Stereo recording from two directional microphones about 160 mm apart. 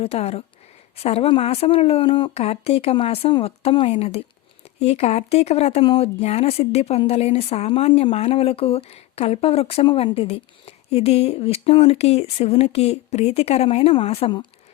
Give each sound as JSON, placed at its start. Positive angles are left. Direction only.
{"t": 0.0, "sound": "speech", "side_deg": 40}